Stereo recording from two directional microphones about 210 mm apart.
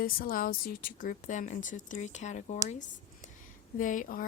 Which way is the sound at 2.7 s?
35° left (ahead or behind).